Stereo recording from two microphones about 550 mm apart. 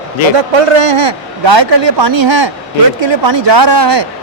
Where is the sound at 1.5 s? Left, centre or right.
Right.